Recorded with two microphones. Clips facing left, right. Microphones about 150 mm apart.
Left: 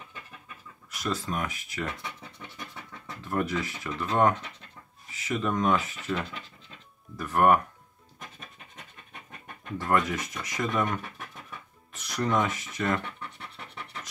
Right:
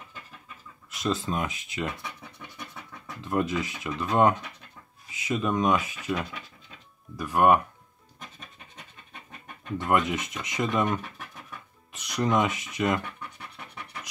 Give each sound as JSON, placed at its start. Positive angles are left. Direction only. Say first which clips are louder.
{"t": 0.8, "sound": "speech", "louder": "right 3 dB", "side_deg": -25}
{"t": 2.0, "sound": "scratch", "louder": "even", "side_deg": 0}
{"t": 3.2, "sound": "speech", "louder": "right 2 dB", "side_deg": -20}
{"t": 8.2, "sound": "scratch", "louder": "even", "side_deg": 0}
{"t": 9.8, "sound": "speech", "louder": "right 1 dB", "side_deg": -20}
{"t": 10.9, "sound": "a sound", "louder": "right 3 dB", "side_deg": 0}
{"t": 11.9, "sound": "speech", "louder": "right 2 dB", "side_deg": -20}
{"t": 13.0, "sound": "scratch", "louder": "even", "side_deg": -10}